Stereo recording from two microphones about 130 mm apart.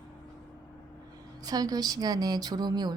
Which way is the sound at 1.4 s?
30° right (ahead or behind).